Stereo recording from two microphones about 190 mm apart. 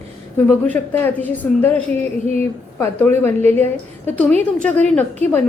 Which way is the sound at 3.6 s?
35° right (ahead or behind).